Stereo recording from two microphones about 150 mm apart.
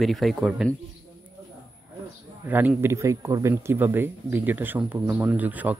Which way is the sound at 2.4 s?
15° right (ahead or behind).